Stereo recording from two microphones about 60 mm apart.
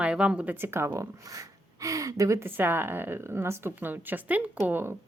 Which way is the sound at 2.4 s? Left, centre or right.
Right.